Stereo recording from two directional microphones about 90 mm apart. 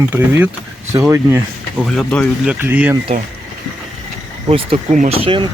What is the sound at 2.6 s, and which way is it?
Speech, 20° right (ahead or behind).